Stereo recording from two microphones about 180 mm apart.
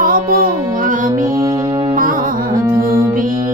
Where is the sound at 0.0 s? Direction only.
50° right (ahead or behind).